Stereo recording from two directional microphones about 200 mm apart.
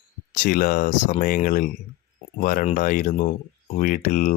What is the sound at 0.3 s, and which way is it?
Speech, 45° left (ahead or behind).